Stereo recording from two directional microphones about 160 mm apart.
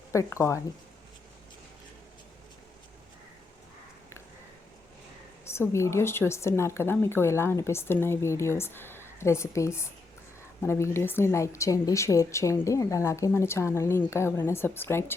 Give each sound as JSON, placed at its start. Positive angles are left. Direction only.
{"t": 0.1, "sound": "speech", "side_deg": 20}
{"t": 5.5, "sound": "a woman's voice", "side_deg": 15}